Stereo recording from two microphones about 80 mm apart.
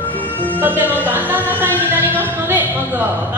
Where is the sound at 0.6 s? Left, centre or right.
Right.